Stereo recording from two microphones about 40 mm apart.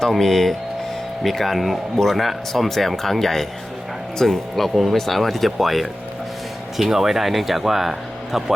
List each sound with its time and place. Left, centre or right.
0.0 s speech: centre